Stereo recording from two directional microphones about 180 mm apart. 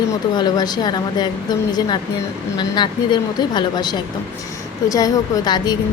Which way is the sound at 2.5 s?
25° left (ahead or behind).